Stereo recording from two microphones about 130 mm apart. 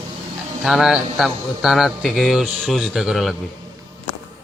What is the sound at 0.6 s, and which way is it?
Speech, 5° right (ahead or behind).